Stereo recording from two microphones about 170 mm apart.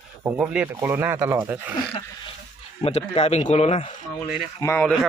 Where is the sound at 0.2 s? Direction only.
10° right (ahead or behind).